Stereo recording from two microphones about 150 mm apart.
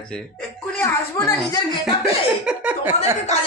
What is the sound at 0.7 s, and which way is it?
Speech, 15° left (ahead or behind).